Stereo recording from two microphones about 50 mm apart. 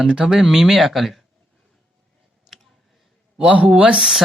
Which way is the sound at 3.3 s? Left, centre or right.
Centre.